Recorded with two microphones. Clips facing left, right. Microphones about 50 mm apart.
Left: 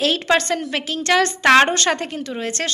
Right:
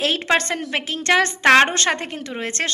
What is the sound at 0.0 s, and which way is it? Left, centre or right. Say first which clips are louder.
A woman's voice: left 2 dB; right.